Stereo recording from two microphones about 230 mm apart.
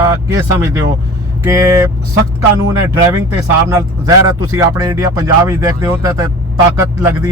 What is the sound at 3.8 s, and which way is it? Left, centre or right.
Speech, centre.